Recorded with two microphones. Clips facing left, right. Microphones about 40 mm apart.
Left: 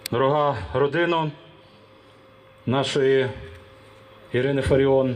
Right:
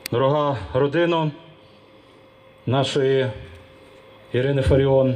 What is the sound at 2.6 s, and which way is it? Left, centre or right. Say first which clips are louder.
Speech: right 1 dB; centre.